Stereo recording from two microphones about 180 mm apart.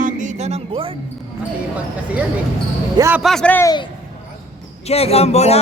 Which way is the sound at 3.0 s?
10° right (ahead or behind).